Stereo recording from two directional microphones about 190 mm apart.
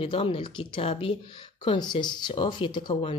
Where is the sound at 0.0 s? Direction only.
30° left (ahead or behind).